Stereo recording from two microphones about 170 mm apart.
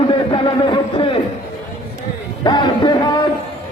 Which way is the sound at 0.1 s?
30° left (ahead or behind).